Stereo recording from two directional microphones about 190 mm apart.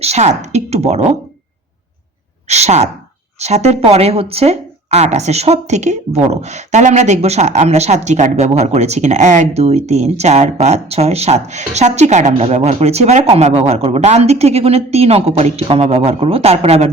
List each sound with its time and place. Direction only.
0.0 s a woman's voice: 35° right (ahead or behind)
2.5 s speech: 35° right (ahead or behind)